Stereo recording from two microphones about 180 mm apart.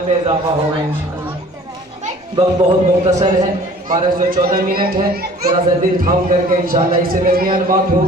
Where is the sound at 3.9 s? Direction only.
50° right (ahead or behind).